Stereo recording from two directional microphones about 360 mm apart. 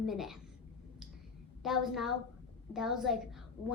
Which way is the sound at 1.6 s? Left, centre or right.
Centre.